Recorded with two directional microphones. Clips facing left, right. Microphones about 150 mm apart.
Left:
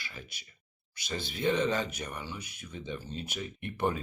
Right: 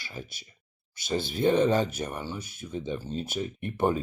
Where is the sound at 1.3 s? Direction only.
50° right (ahead or behind).